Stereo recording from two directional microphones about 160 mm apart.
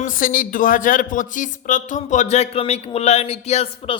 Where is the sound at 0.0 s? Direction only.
60° left (ahead or behind).